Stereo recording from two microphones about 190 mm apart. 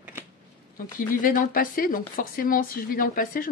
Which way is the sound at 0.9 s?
45° left (ahead or behind).